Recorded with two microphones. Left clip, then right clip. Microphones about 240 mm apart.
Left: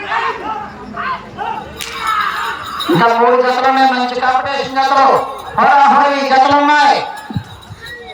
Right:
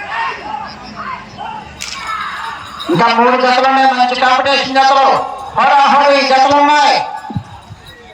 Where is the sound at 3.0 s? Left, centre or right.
Right.